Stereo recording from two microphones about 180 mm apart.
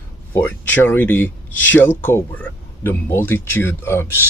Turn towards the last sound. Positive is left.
turn(degrees=15)  # may be behind; listen again after turning